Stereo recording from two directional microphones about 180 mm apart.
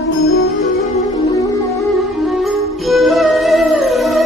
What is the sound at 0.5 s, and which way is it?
Music, 40° left (ahead or behind).